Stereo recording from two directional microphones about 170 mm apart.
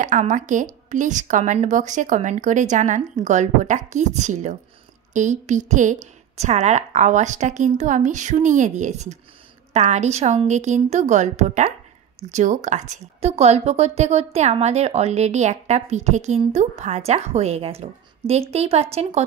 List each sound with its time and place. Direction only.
0.0 s a woman's voice: 45° right (ahead or behind)